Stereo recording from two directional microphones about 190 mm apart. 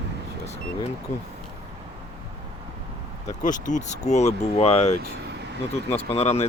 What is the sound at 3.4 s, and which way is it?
Speech, 40° left (ahead or behind).